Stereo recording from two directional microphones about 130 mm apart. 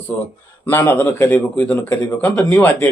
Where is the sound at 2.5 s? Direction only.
20° left (ahead or behind).